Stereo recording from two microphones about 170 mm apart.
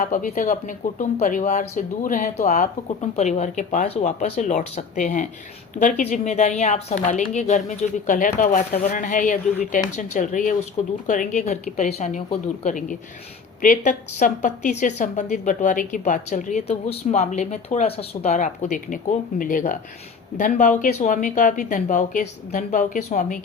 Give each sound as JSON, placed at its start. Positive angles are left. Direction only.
{"t": 0.0, "sound": "a woman's voice", "side_deg": 50}